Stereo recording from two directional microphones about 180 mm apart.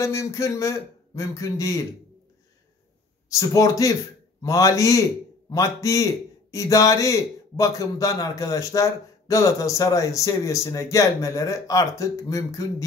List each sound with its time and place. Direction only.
0.0 s speech: 15° left (ahead or behind)
3.3 s a man's voice: 20° left (ahead or behind)